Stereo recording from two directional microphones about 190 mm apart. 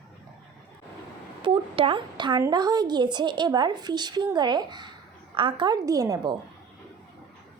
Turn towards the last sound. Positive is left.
turn(degrees=-20)  # may be behind; listen again after turning